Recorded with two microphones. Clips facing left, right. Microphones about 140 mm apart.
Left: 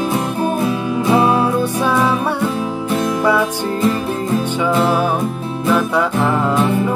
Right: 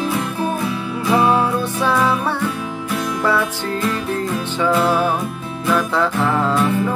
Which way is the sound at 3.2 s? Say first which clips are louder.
Left 3 dB; 15° left (ahead or behind).